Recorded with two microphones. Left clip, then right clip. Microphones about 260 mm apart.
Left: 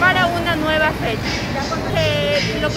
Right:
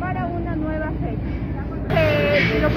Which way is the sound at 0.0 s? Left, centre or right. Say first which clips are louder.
Left 11 dB; left.